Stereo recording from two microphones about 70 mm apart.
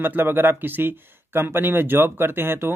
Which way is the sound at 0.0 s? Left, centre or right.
Right.